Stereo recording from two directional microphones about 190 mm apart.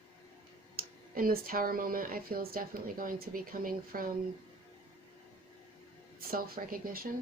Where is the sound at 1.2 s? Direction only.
50° right (ahead or behind).